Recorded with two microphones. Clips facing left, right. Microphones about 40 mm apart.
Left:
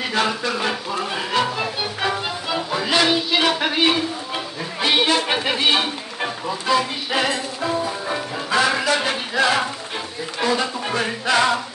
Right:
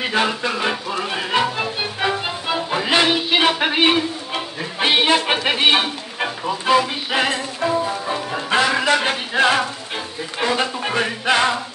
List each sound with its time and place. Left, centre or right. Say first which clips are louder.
0.1 s music: even; right
4.7 s speech: right 2 dB; right
8.5 s music: right 2 dB; right